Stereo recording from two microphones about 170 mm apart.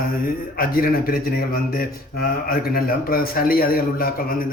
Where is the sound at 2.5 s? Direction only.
60° left (ahead or behind).